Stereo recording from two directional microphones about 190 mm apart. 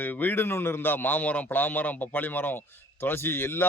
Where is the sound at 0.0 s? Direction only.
10° left (ahead or behind).